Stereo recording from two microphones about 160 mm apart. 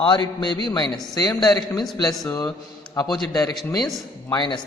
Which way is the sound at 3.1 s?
Centre (ahead or behind).